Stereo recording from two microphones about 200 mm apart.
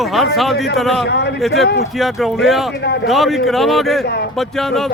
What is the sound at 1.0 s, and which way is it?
Speech, 55° left (ahead or behind).